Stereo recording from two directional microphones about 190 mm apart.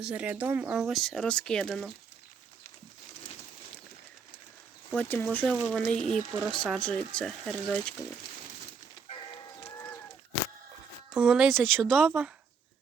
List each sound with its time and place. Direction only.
0.0 s speech: 5° right (ahead or behind)
4.9 s speech: 10° left (ahead or behind)
9.0 s livestock: 25° left (ahead or behind)
11.1 s speech: 5° right (ahead or behind)